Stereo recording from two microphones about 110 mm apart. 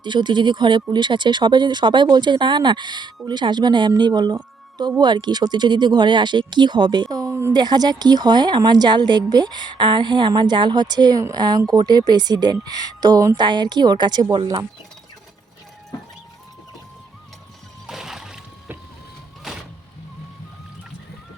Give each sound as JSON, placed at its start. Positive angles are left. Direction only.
{"t": 0.0, "sound": "a woman's voice", "side_deg": -45}
{"t": 7.5, "sound": "a woman's voice", "side_deg": -40}
{"t": 17.8, "sound": "music", "side_deg": -5}
{"t": 19.5, "sound": "vehicle", "side_deg": -5}